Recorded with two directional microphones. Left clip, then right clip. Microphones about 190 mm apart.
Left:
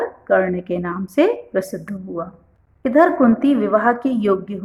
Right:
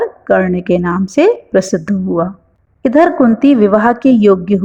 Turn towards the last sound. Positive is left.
turn(degrees=-35)  # may be behind; listen again after turning